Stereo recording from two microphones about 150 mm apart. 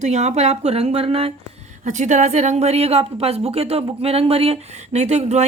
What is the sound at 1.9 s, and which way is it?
A woman's voice, 55° right (ahead or behind).